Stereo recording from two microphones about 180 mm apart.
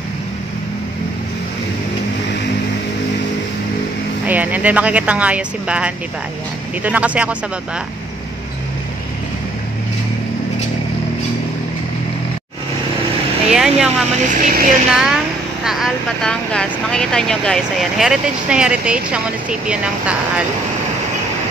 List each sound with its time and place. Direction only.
4.3 s speech: 10° right (ahead or behind)
13.5 s speech: 5° right (ahead or behind)
14.3 s speech: 50° right (ahead or behind)
14.9 s speech: 5° right (ahead or behind)